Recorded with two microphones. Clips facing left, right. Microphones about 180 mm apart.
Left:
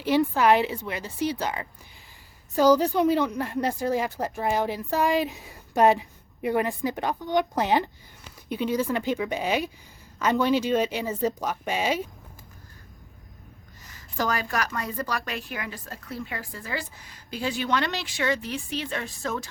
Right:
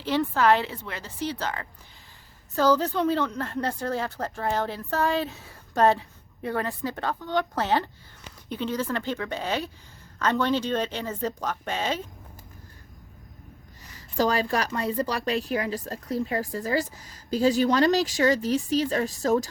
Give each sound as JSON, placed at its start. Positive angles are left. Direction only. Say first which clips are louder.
{"t": 0.0, "sound": "speech", "louder": "left 2 dB", "side_deg": 15}
{"t": 14.2, "sound": "a woman's voice", "louder": "right 3 dB", "side_deg": -30}